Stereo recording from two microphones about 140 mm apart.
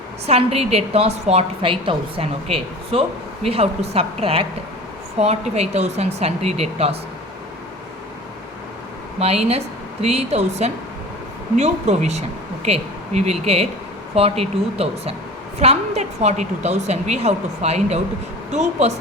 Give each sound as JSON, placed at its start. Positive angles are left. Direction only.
{"t": 0.3, "sound": "a woman's voice", "side_deg": -45}
{"t": 9.1, "sound": "a woman's voice", "side_deg": -45}